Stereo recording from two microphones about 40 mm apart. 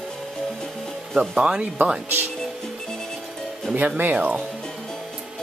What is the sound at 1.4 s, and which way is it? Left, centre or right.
Speech, centre.